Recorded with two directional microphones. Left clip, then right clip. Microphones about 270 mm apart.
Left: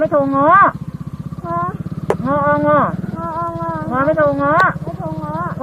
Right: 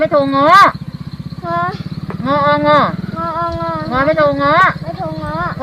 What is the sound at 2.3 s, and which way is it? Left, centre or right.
Speech, right.